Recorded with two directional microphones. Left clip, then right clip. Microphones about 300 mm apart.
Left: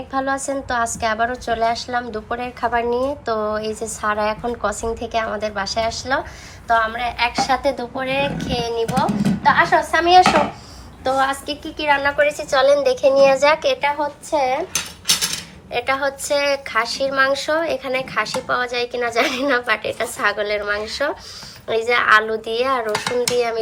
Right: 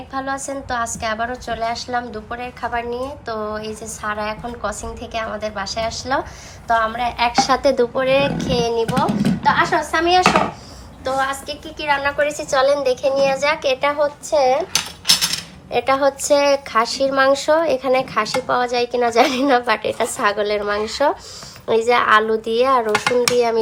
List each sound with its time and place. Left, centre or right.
0.1 s a woman's voice: centre
14.0 s a woman's voice: centre
15.7 s a woman's voice: centre